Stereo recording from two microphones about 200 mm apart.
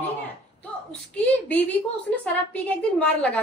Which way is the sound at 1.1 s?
10° left (ahead or behind).